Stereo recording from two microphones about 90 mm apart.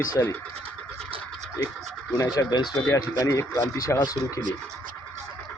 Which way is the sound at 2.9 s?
40° left (ahead or behind).